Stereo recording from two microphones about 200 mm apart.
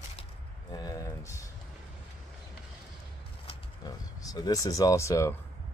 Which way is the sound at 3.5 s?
20° left (ahead or behind).